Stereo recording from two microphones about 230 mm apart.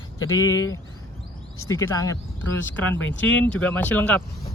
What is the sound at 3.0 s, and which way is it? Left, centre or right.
Speech, left.